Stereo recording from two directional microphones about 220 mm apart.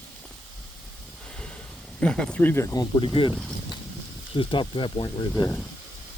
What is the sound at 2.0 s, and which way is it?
Speech, 5° left (ahead or behind).